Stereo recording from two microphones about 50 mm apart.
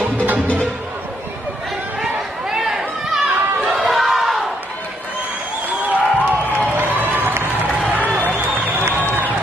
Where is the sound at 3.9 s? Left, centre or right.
Centre.